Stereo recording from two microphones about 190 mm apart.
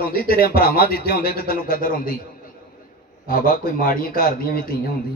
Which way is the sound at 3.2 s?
50° left (ahead or behind).